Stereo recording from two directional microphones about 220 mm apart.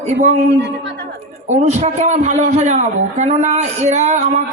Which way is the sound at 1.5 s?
30° right (ahead or behind).